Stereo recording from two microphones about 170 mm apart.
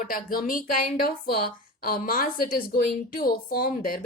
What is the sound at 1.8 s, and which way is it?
Speech, 55° left (ahead or behind).